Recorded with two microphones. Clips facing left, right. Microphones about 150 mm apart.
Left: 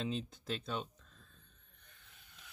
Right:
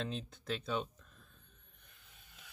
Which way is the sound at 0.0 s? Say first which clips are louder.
Left 2 dB; centre (ahead or behind).